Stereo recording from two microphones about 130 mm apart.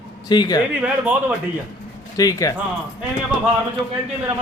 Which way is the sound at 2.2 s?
25° left (ahead or behind).